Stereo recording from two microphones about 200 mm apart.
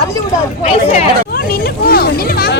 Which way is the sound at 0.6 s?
45° left (ahead or behind).